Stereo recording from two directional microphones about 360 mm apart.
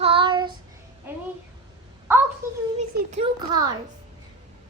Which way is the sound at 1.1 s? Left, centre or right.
Centre.